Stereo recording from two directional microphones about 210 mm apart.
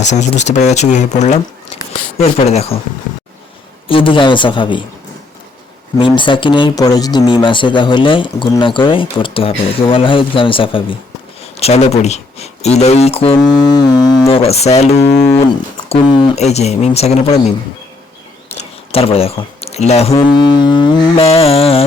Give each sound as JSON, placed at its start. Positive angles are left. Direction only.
{"t": 0.0, "sound": "speech", "side_deg": 35}
{"t": 3.8, "sound": "speech", "side_deg": 25}
{"t": 6.0, "sound": "speech", "side_deg": 25}
{"t": 18.9, "sound": "speech", "side_deg": 25}